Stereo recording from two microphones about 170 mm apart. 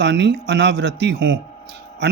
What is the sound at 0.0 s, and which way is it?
A man's voice, 90° right.